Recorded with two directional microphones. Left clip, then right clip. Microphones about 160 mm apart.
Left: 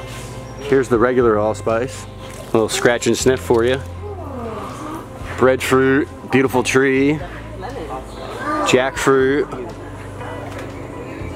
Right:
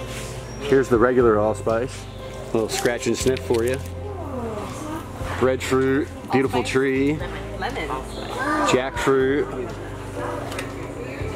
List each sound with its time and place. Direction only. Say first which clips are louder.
0.7 s speech: left 2 dB; 20° left (ahead or behind)
2.5 s speech: left 7 dB; 30° left (ahead or behind)
5.4 s speech: left 6 dB; 30° left (ahead or behind)
8.6 s speech: left 7 dB; 30° left (ahead or behind)